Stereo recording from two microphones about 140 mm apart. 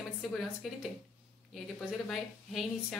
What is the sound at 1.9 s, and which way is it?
Speech, centre (ahead or behind).